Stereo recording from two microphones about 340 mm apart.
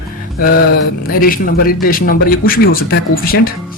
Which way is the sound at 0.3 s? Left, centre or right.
Left.